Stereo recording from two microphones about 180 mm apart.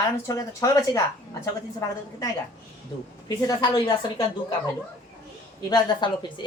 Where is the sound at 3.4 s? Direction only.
20° left (ahead or behind).